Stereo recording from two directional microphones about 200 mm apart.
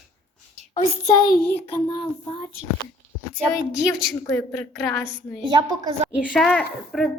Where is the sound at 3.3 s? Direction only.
5° left (ahead or behind).